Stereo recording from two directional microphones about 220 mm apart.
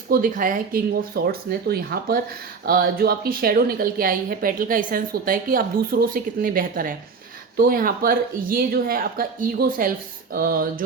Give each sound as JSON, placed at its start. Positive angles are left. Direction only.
{"t": 0.1, "sound": "a woman's voice", "side_deg": -40}